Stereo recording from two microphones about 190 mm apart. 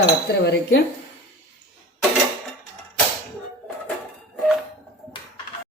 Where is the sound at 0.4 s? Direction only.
65° left (ahead or behind).